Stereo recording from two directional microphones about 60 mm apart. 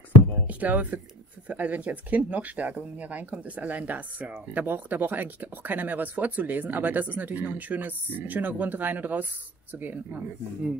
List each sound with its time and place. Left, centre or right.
0.5 s speech: right